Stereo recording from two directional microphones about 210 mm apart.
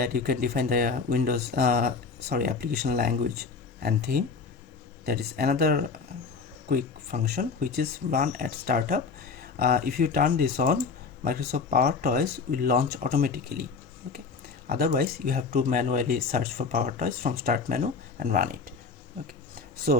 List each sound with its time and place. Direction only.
0.0 s speech: 45° right (ahead or behind)
14.7 s speech: 45° right (ahead or behind)
19.9 s speech: 40° right (ahead or behind)